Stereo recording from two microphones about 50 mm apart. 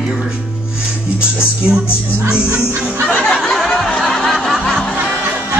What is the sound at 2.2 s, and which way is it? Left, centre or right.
Music, right.